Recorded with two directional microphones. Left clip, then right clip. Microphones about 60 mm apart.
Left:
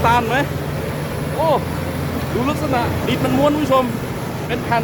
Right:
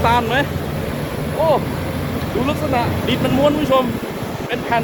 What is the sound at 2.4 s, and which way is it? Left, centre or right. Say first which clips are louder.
Speech: right 1 dB; left.